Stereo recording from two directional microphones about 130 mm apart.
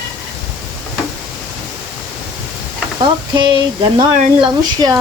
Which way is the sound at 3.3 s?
35° right (ahead or behind).